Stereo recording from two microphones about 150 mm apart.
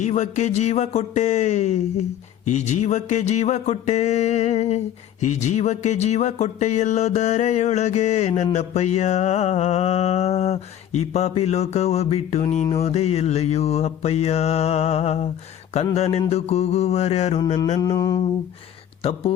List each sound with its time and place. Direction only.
0.0 s music: 50° left (ahead or behind)
17.7 s mantra: 25° left (ahead or behind)